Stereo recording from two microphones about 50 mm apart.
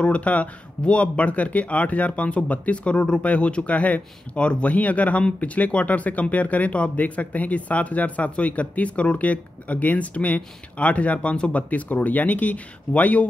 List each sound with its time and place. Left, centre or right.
0.0 s speech: left